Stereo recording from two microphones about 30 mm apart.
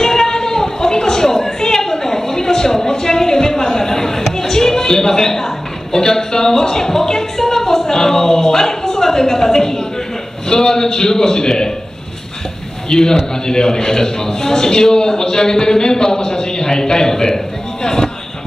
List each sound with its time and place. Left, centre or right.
0.0 s a sound: left
10.5 s a man's voice: left
12.9 s a man's voice: left
13.5 s a man's voice: left